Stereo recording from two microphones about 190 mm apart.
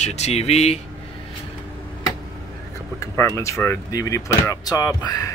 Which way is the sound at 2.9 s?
15° left (ahead or behind).